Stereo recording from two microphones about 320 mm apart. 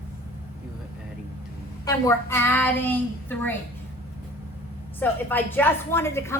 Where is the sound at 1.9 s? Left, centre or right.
Centre.